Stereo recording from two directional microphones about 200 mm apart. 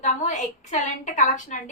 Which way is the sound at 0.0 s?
35° left (ahead or behind).